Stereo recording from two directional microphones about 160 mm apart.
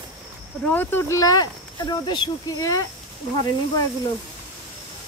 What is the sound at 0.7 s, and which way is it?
Speech, 10° left (ahead or behind).